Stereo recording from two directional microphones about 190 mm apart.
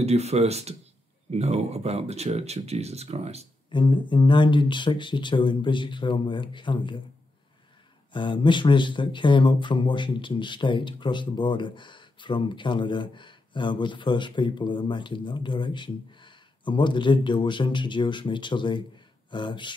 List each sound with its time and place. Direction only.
0.0 s speech: 35° right (ahead or behind)
3.7 s speech: 25° left (ahead or behind)
8.1 s speech: 25° left (ahead or behind)